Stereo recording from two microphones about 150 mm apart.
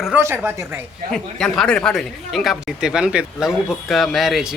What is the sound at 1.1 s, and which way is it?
Speech, 5° left (ahead or behind).